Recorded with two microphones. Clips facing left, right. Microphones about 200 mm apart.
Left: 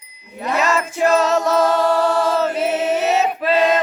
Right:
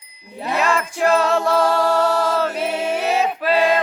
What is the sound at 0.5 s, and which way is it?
Music, centre (ahead or behind).